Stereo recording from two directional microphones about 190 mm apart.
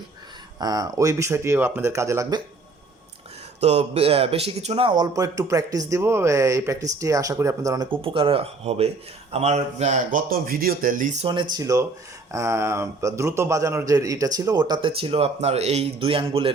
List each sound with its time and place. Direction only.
0.6 s speech: 20° right (ahead or behind)
3.6 s a man's voice: 35° right (ahead or behind)